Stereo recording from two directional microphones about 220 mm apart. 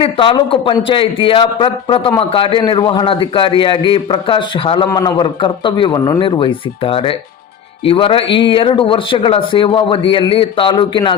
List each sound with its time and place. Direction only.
0.0 s a man's voice: 25° left (ahead or behind)